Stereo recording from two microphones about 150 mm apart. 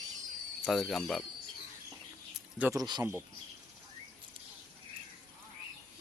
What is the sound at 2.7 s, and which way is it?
Speech, 30° right (ahead or behind).